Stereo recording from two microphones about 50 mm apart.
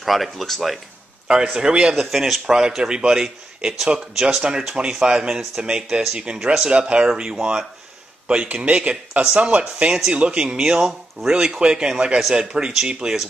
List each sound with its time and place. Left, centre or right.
0.0 s speech: centre
1.2 s speech: centre
2.0 s speech: centre